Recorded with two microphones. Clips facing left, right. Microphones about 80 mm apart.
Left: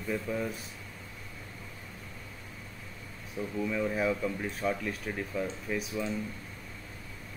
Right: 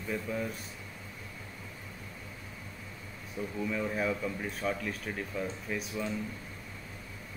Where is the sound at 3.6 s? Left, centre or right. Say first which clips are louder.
Left 2 dB; centre.